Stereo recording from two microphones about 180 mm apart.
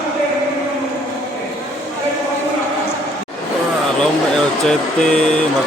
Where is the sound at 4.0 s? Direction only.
5° left (ahead or behind).